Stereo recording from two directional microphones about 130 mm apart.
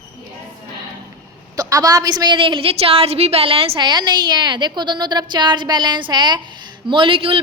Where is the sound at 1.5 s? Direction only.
30° right (ahead or behind).